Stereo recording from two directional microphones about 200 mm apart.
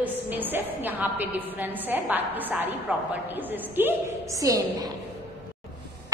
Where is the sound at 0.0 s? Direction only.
10° right (ahead or behind).